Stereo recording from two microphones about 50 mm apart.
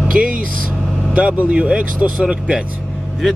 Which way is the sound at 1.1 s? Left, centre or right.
Right.